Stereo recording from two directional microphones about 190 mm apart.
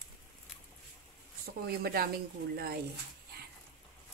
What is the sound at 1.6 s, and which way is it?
Speech, 55° right (ahead or behind).